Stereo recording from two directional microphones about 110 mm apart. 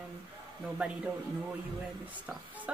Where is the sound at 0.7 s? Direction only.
10° right (ahead or behind).